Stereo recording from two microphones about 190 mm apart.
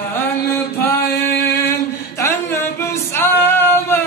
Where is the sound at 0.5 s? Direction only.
10° left (ahead or behind).